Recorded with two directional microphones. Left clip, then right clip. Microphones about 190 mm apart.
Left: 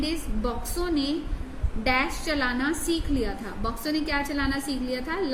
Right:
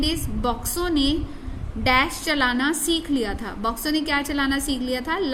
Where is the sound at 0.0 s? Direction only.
60° right (ahead or behind).